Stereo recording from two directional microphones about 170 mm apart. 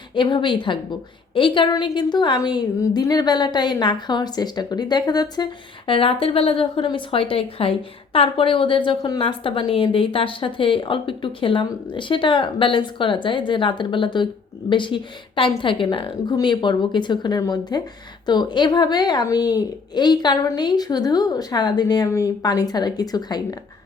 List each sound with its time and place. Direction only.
0.1 s a woman's voice: 30° left (ahead or behind)